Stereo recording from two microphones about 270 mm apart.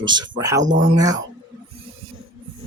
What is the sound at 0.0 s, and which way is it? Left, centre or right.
Speech, centre.